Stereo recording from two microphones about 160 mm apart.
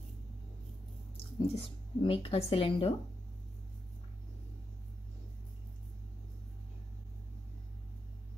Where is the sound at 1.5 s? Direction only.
35° left (ahead or behind).